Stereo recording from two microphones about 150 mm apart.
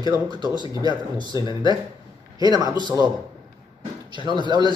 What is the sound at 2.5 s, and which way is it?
Speech, 25° right (ahead or behind).